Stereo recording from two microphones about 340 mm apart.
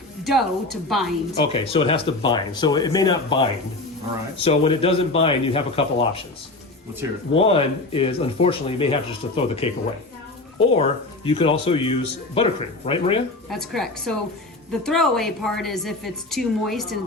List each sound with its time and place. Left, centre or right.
0.3 s a woman's voice: centre
1.5 s speech: centre
7.3 s speech: centre
13.5 s a woman's voice: centre